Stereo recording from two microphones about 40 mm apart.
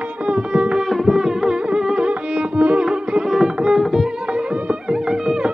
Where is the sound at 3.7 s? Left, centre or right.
Centre.